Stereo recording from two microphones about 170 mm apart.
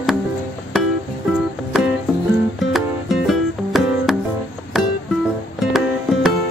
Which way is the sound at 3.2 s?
Centre (ahead or behind).